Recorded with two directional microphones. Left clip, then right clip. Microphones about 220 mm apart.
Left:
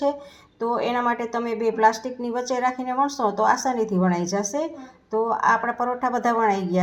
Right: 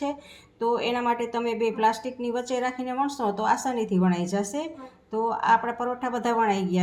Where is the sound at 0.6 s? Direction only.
20° left (ahead or behind).